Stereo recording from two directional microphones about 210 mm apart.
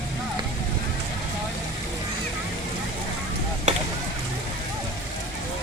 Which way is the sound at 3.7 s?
35° right (ahead or behind).